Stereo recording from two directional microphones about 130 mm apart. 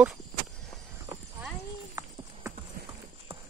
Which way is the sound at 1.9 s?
25° right (ahead or behind).